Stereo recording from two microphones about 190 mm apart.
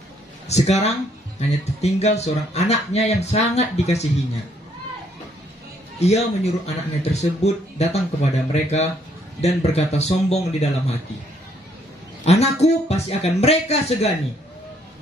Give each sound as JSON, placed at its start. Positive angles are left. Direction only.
{"t": 0.5, "sound": "speech", "side_deg": 35}
{"t": 5.9, "sound": "speech", "side_deg": 35}
{"t": 12.3, "sound": "speech", "side_deg": 35}